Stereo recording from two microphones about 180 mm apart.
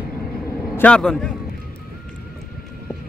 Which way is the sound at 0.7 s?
5° left (ahead or behind).